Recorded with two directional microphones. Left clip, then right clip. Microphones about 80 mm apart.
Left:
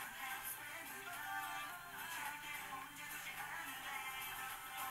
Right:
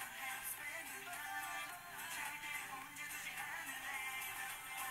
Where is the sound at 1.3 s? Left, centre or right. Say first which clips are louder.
Left 1 dB; right.